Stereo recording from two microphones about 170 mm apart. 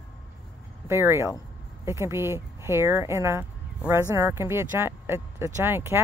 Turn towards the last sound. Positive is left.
turn(degrees=-15)  # may be behind; listen again after turning